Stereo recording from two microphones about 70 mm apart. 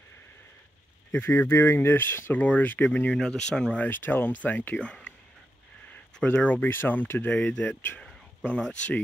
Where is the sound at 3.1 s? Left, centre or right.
Centre.